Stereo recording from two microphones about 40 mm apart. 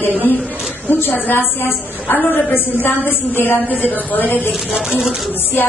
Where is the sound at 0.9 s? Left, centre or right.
Left.